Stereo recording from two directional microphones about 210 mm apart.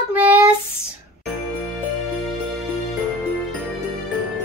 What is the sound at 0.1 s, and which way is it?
Child singing, 5° right (ahead or behind).